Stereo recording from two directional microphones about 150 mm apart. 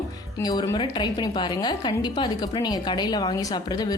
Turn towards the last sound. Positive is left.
turn(degrees=25)  # may be behind; listen again after turning